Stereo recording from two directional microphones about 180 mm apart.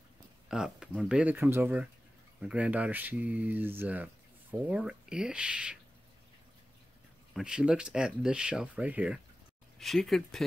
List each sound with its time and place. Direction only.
0.5 s speech: 5° right (ahead or behind)
7.3 s speech: 5° right (ahead or behind)